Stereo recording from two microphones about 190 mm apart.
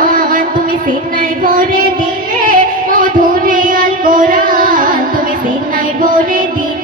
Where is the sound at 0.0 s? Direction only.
45° right (ahead or behind).